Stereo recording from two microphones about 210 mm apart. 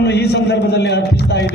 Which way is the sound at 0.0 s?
50° left (ahead or behind).